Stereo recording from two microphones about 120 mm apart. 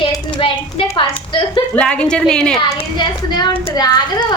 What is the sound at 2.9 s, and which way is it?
Speech, 40° left (ahead or behind).